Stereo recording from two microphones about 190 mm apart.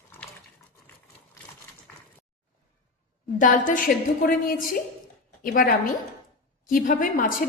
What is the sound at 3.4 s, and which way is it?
A woman's voice, 45° left (ahead or behind).